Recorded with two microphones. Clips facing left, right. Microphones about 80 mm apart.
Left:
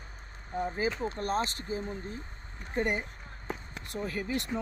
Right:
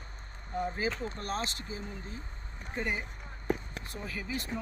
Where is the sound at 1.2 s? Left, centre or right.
Left.